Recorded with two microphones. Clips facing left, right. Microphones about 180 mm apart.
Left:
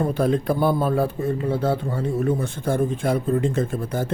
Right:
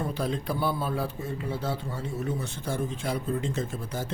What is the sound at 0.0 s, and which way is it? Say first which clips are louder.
A man's voice: left 9 dB; 55° left (ahead or behind).